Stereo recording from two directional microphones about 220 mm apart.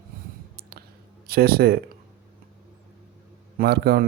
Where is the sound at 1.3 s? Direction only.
45° right (ahead or behind).